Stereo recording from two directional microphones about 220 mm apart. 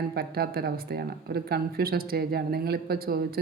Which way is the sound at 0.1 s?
45° right (ahead or behind).